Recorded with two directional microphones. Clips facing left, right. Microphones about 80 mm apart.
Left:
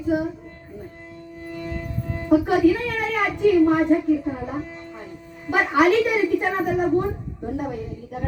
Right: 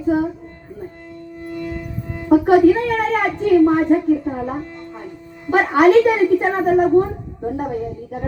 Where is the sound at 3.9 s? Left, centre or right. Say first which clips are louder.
Right 3 dB; right.